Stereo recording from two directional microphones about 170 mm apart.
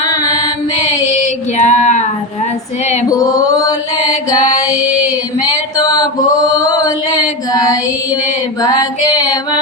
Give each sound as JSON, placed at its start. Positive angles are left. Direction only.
{"t": 0.8, "sound": "a sound", "side_deg": 40}
{"t": 2.8, "sound": "female singing", "side_deg": 40}
{"t": 3.1, "sound": "chant", "side_deg": 20}
{"t": 4.5, "sound": "child singing", "side_deg": 20}
{"t": 5.4, "sound": "a sound", "side_deg": 20}
{"t": 6.5, "sound": "chant", "side_deg": 20}
{"t": 8.6, "sound": "female singing", "side_deg": 20}